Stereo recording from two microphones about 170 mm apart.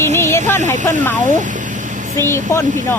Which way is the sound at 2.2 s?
15° left (ahead or behind).